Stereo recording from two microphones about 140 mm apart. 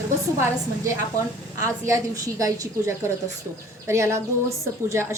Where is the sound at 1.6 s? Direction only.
20° right (ahead or behind).